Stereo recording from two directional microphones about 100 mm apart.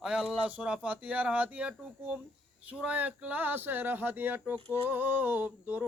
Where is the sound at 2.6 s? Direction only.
10° right (ahead or behind).